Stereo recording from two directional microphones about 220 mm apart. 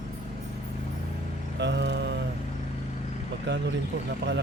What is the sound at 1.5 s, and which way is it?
Music, 50° right (ahead or behind).